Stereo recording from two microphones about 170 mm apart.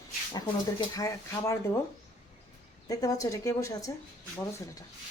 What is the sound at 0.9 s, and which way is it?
Speech, 20° left (ahead or behind).